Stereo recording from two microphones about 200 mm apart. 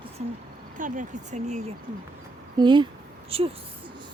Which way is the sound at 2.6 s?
20° right (ahead or behind).